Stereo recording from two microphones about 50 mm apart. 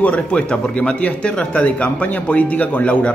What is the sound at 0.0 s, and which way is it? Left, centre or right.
Speech, left.